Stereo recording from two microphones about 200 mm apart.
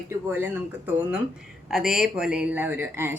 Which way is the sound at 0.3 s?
10° right (ahead or behind).